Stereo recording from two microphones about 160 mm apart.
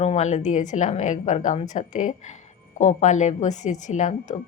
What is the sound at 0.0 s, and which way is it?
A woman's voice, 45° left (ahead or behind).